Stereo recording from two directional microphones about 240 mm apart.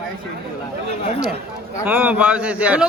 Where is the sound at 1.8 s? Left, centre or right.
Centre.